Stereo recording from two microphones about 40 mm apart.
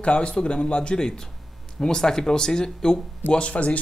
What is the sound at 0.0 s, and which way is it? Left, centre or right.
A man's voice, left.